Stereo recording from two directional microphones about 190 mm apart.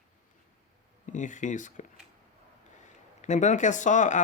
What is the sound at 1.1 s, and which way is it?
Speech, 40° left (ahead or behind).